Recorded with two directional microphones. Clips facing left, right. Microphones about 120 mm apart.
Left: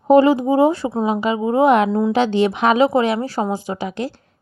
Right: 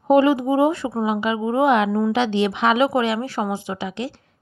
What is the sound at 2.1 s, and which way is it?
A woman's voice, 40° left (ahead or behind).